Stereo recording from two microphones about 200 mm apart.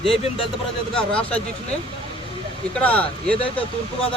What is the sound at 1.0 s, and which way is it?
Speech, 5° left (ahead or behind).